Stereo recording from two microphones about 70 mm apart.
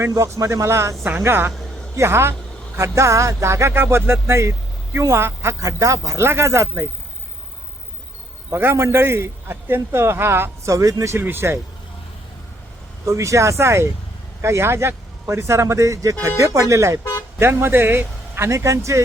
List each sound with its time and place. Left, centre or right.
0.1 s a man's voice: right
5.5 s speech: right
6.1 s a man's voice: right
8.4 s a man's voice: right
10.7 s speech: right
11.2 s a man's voice: right
13.1 s speech: right
17.4 s a man's voice: right